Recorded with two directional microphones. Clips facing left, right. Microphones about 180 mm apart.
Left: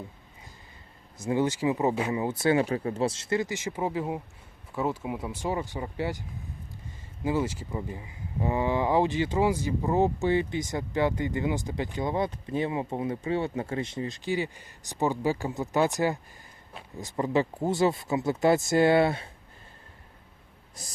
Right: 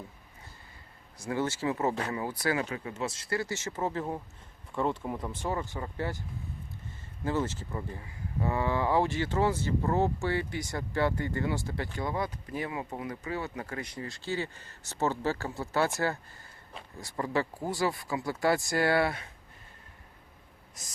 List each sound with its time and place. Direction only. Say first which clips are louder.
1.2 s speech: left 5 dB; 20° left (ahead or behind)
7.3 s speech: left 3 dB; 10° left (ahead or behind)